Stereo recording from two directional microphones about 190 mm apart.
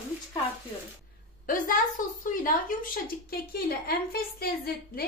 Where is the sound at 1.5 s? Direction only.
45° left (ahead or behind).